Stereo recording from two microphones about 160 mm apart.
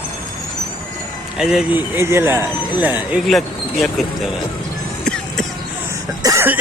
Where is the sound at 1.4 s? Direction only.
5° right (ahead or behind).